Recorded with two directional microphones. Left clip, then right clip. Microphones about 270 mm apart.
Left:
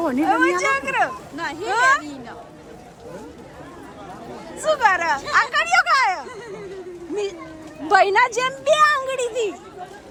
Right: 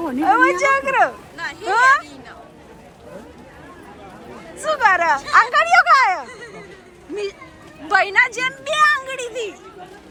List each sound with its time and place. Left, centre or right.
0.0 s speech: centre
1.4 s speech: left
1.7 s a sound: centre
4.6 s speech: centre
7.9 s speech: centre